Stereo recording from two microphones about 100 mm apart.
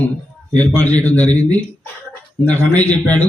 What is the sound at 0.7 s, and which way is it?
A man's voice, 15° left (ahead or behind).